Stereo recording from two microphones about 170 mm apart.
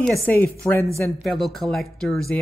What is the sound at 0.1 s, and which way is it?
Speech, 10° left (ahead or behind).